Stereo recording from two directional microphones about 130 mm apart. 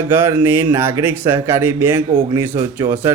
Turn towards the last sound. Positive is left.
turn(degrees=-15)  # may be behind; listen again after turning